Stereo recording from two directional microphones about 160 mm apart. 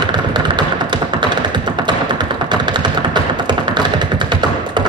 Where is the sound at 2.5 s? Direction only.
30° right (ahead or behind).